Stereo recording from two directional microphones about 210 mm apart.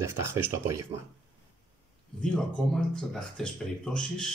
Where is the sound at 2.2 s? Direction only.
Centre (ahead or behind).